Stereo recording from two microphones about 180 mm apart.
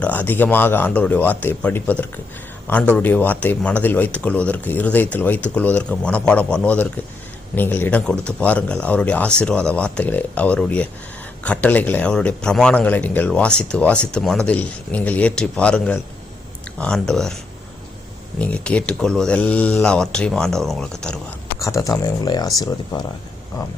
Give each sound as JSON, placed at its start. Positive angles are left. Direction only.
{"t": 0.0, "sound": "speech", "side_deg": 10}
{"t": 18.3, "sound": "speech", "side_deg": 5}
{"t": 21.6, "sound": "speech", "side_deg": 15}